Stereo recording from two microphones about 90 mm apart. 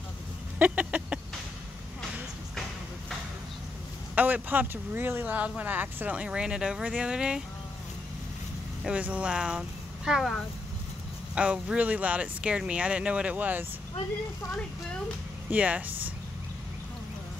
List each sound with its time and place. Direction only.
0.6 s a sound: 15° right (ahead or behind)
4.1 s speech: 20° right (ahead or behind)
8.8 s speech: 15° right (ahead or behind)
11.3 s speech: 10° right (ahead or behind)
15.5 s speech: 15° right (ahead or behind)